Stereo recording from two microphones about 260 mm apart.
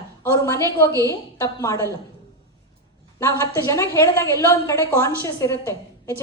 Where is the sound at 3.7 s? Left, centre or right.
Centre.